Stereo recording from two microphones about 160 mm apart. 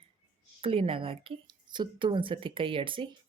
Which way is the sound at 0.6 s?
35° right (ahead or behind).